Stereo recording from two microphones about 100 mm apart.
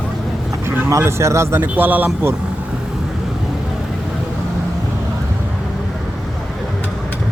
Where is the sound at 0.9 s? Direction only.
25° right (ahead or behind).